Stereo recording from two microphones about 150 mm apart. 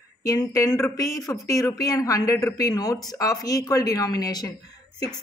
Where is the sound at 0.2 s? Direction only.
25° left (ahead or behind).